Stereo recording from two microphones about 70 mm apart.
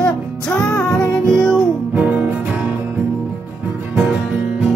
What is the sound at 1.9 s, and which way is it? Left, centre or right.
Music, right.